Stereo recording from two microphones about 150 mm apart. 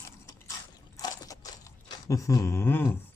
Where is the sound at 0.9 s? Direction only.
20° left (ahead or behind).